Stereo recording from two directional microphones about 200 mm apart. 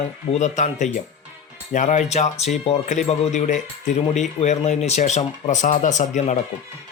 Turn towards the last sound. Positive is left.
turn(degrees=35)  # may be behind; listen again after turning